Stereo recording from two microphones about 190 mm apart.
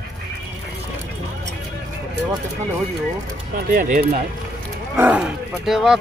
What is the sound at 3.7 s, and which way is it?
Speech, 45° right (ahead or behind).